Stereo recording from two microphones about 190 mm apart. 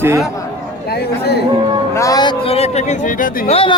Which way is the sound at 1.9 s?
20° left (ahead or behind).